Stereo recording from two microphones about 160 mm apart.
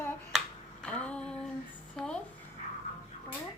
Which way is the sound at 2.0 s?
5° left (ahead or behind).